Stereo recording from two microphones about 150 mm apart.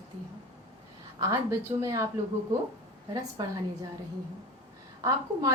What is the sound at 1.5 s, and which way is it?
Speech, 20° right (ahead or behind).